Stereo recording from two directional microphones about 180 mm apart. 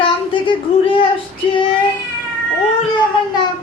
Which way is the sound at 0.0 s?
30° left (ahead or behind).